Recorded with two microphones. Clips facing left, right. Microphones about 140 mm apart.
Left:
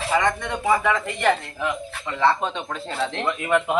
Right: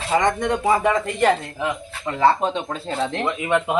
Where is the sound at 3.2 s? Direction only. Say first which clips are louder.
Left 1 dB; 20° right (ahead or behind).